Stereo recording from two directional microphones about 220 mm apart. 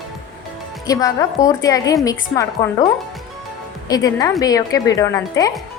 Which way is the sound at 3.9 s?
15° left (ahead or behind).